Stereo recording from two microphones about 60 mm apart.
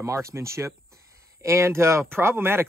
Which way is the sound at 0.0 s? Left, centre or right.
Right.